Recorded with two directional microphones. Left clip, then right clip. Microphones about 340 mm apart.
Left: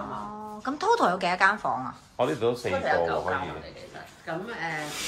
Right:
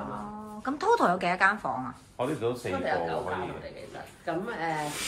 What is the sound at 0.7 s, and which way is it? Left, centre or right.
A woman's voice, centre.